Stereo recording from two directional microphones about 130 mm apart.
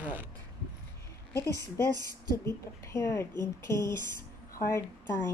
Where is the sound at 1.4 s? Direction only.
25° right (ahead or behind).